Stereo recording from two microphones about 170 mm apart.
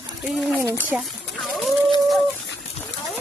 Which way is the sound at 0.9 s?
Centre (ahead or behind).